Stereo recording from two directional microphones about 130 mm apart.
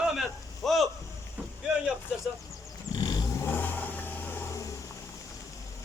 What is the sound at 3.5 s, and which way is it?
Vehicle, 15° left (ahead or behind).